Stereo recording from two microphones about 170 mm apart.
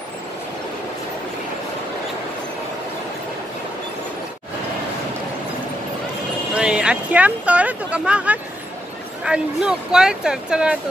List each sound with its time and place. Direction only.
6.5 s speech: 5° right (ahead or behind)